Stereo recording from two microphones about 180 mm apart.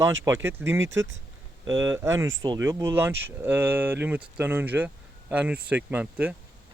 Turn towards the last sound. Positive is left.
turn(degrees=-10)  # may be behind; listen again after turning